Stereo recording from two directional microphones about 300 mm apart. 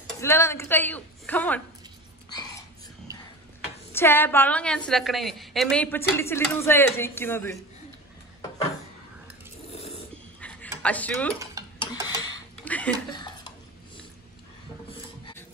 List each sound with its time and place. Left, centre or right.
0.0 s speech: centre
3.9 s a woman's voice: centre
9.7 s filing: centre
10.8 s speech: centre
11.8 s tick-tock: centre
12.5 s a sound: centre
14.9 s a sound: centre